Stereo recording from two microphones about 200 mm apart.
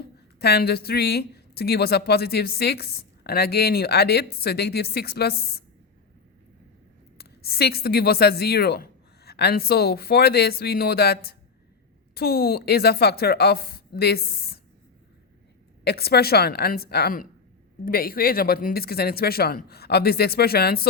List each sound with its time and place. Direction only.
0.3 s speech: 55° left (ahead or behind)
7.2 s speech: 50° left (ahead or behind)
15.8 s speech: 50° left (ahead or behind)